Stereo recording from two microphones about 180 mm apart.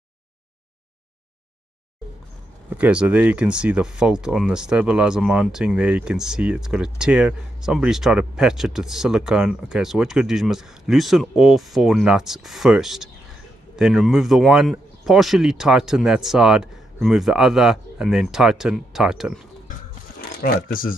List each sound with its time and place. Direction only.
2.7 s speech: 5° right (ahead or behind)
20.4 s speech: 55° left (ahead or behind)